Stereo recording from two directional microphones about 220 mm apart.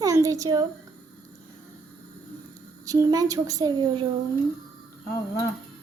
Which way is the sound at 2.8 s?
15° right (ahead or behind).